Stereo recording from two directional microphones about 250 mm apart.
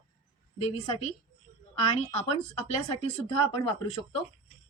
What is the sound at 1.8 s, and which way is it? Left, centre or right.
Speech, left.